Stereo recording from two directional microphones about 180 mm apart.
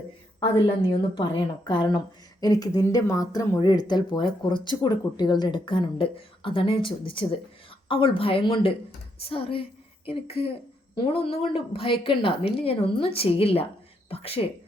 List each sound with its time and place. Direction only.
0.3 s a woman's voice: 25° left (ahead or behind)